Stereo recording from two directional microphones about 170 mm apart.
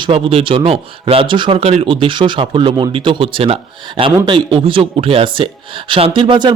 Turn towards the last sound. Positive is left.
turn(degrees=-30)  # may be behind; listen again after turning